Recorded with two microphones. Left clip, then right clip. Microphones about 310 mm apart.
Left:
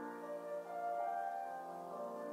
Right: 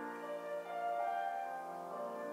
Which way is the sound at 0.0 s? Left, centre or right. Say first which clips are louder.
Right 2 dB; centre.